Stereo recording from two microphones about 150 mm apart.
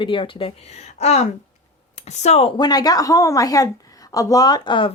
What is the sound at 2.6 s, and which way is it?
A woman's voice, 25° left (ahead or behind).